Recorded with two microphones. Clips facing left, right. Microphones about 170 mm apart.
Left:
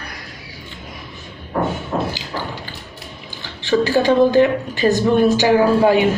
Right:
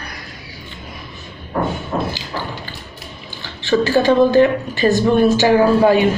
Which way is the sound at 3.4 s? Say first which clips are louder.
Right 1 dB; 15° left (ahead or behind).